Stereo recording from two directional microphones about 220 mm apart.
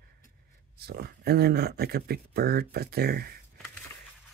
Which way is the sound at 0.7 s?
45° right (ahead or behind).